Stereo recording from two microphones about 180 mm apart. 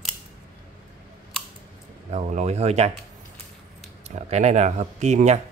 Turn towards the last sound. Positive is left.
turn(degrees=-40)  # may be behind; listen again after turning